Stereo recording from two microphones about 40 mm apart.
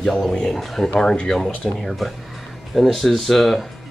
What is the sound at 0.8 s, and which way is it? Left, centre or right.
Speech, left.